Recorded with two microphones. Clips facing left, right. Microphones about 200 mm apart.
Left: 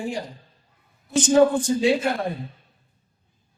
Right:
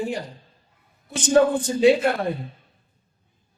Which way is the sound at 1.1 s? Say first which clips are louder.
Left 1 dB; 60° right (ahead or behind).